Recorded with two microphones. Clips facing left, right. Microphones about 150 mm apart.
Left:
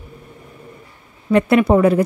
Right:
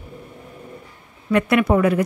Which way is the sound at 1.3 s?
30° left (ahead or behind).